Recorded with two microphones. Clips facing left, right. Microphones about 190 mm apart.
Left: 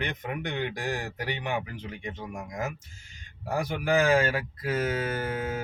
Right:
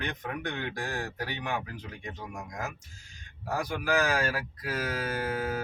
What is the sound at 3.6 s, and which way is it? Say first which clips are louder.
Speech: left 4 dB; 25° left (ahead or behind).